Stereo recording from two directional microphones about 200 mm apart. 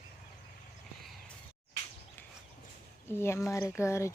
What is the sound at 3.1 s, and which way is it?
Speech, 10° left (ahead or behind).